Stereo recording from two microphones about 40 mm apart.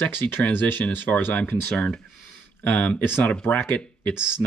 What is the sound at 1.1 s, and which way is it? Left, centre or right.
Speech, left.